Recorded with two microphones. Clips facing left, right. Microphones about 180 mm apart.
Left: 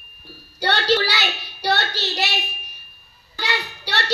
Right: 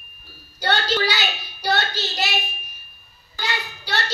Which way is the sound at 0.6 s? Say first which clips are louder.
Left 2 dB; 70° left (ahead or behind).